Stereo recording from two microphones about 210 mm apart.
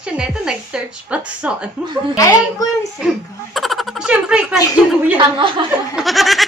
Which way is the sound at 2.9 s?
Centre (ahead or behind).